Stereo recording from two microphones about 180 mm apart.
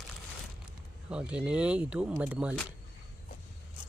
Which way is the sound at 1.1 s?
5° right (ahead or behind).